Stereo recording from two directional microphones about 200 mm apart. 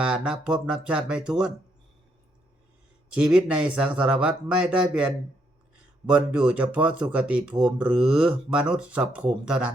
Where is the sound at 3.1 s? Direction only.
5° right (ahead or behind).